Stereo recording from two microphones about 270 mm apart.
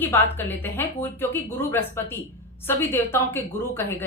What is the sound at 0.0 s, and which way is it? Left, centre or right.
A woman's voice, centre.